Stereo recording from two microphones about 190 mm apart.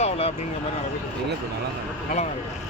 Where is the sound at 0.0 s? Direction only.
30° left (ahead or behind).